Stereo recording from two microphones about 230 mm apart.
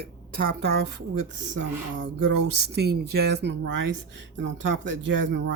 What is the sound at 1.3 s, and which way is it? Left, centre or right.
Speech, right.